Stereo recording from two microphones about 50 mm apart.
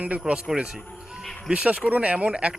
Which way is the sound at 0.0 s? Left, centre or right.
Right.